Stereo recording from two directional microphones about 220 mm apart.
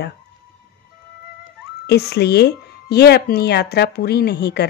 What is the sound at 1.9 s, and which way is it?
Speech, 45° left (ahead or behind).